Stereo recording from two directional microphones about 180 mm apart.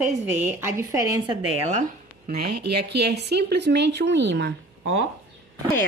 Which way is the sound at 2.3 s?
60° right (ahead or behind).